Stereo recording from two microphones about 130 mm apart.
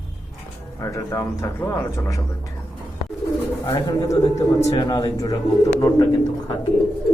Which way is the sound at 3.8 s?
25° left (ahead or behind).